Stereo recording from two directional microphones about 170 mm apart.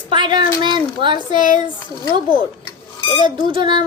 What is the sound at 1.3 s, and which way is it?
Speech, 50° left (ahead or behind).